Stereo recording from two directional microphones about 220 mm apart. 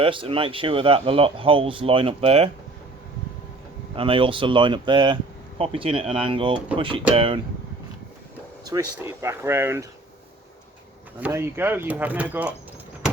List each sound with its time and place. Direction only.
0.0 s speech: 25° right (ahead or behind)
3.9 s speech: 25° right (ahead or behind)
8.6 s speech: 15° right (ahead or behind)
11.2 s speech: 10° right (ahead or behind)